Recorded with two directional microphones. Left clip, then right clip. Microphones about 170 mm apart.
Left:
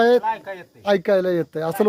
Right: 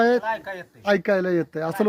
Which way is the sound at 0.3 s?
45° right (ahead or behind).